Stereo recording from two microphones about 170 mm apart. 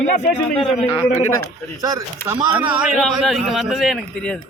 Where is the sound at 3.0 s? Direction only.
Centre (ahead or behind).